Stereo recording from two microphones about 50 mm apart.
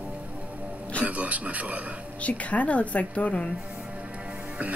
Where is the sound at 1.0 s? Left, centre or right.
Right.